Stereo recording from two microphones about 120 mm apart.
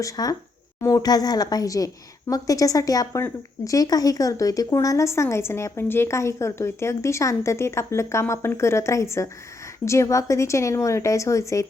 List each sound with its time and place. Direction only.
0.0 s a woman's voice: 30° left (ahead or behind)